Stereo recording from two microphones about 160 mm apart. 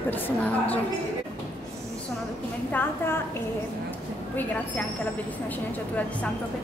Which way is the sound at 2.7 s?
15° left (ahead or behind).